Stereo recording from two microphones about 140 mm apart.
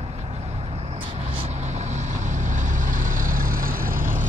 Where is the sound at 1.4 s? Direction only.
50° right (ahead or behind).